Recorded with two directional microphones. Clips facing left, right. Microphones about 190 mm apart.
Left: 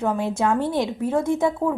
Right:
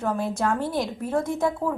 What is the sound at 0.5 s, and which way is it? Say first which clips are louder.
Speech: left 4 dB; 20° left (ahead or behind).